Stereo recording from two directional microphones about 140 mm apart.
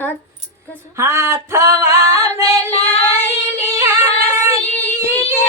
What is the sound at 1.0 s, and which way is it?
Female singing, 20° right (ahead or behind).